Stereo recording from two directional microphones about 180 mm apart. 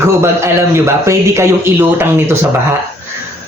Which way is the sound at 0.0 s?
15° right (ahead or behind).